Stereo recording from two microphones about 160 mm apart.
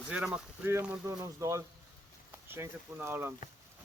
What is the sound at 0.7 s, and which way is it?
Speech, 15° right (ahead or behind).